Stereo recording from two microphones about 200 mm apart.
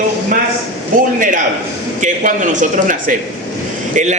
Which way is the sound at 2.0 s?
40° right (ahead or behind).